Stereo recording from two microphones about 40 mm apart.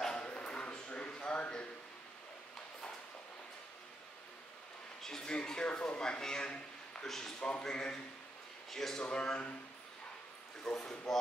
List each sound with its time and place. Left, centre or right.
0.2 s a sound: left
5.0 s speech: centre
7.3 s speech: left
8.6 s a man's voice: centre
9.1 s speech: left
10.6 s speech: centre